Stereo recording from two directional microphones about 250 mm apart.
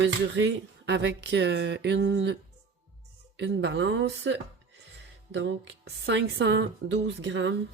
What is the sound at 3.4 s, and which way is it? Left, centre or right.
Speech, right.